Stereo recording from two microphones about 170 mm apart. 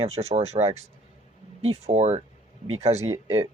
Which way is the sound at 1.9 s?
40° right (ahead or behind).